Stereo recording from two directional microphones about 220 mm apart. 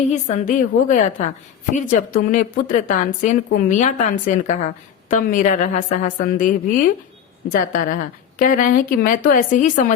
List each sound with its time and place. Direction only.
0.1 s a woman's voice: 30° left (ahead or behind)